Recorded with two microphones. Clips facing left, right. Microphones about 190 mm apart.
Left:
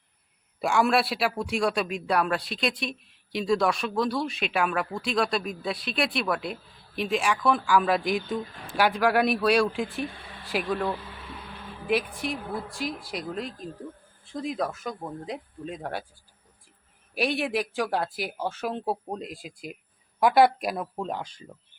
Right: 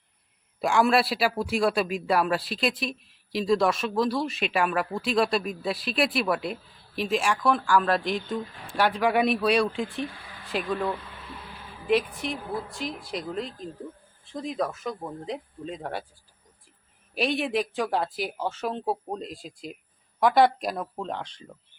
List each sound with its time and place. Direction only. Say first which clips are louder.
0.6 s speech: right 1 dB; centre (ahead or behind)
17.2 s speech: right 1 dB; 5° left (ahead or behind)